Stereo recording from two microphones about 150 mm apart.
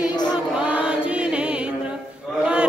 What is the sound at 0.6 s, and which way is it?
Chant, 5° right (ahead or behind).